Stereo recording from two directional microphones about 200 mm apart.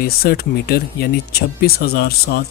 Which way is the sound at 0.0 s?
50° left (ahead or behind).